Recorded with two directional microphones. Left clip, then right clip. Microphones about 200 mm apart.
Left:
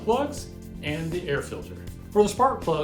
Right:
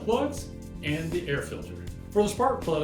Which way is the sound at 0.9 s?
Centre (ahead or behind).